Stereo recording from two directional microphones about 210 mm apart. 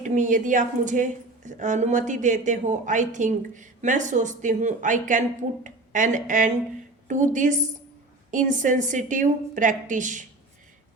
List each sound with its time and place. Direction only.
0.0 s a woman's voice: 35° right (ahead or behind)